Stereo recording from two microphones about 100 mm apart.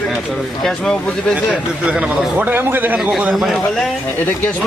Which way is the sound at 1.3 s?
10° right (ahead or behind).